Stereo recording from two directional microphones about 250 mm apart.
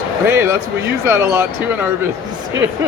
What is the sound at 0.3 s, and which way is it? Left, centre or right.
Speech, centre.